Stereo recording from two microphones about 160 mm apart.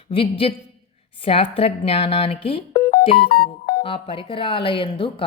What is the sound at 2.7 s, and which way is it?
Music, 60° left (ahead or behind).